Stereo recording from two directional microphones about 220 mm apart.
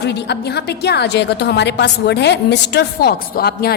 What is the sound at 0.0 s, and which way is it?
A woman's voice, 50° left (ahead or behind).